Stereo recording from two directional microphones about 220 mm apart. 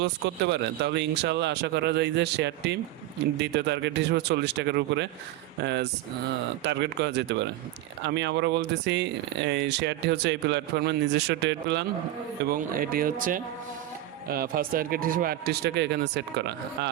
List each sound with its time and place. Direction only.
0.0 s speech: 55° right (ahead or behind)
6.6 s speech: 50° right (ahead or behind)
12.5 s speech: 40° right (ahead or behind)